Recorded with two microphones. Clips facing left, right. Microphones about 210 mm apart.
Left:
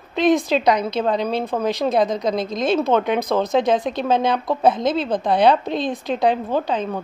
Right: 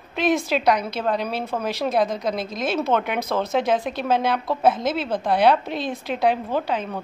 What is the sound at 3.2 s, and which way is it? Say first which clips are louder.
Speech: left 4 dB; 15° left (ahead or behind).